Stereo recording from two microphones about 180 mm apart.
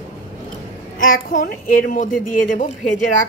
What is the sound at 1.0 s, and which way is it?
A woman's voice, 50° left (ahead or behind).